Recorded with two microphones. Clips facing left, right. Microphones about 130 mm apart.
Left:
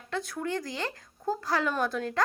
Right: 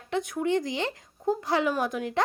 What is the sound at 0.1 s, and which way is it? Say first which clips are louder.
A woman's voice: right 6 dB; 20° right (ahead or behind).